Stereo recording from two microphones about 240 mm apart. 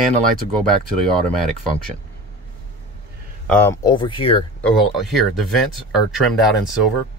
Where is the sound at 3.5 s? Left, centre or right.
Centre.